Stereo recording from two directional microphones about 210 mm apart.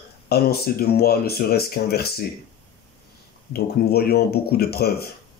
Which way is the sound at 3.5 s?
50° left (ahead or behind).